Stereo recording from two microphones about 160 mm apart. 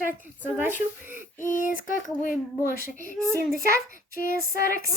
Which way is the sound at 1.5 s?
55° left (ahead or behind).